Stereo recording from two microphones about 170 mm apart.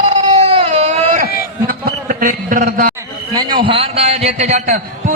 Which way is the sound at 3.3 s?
25° right (ahead or behind).